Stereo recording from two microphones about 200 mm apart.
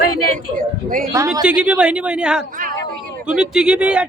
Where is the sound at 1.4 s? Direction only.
5° right (ahead or behind).